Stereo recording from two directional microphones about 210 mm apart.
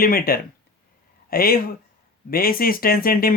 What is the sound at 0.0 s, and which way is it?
Speech, 45° left (ahead or behind).